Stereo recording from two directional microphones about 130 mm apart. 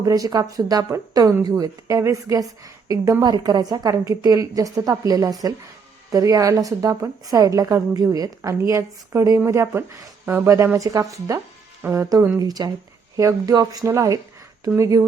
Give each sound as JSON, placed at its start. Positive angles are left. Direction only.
{"t": 0.0, "sound": "a woman's voice", "side_deg": -25}
{"t": 12.4, "sound": "a woman's voice", "side_deg": -30}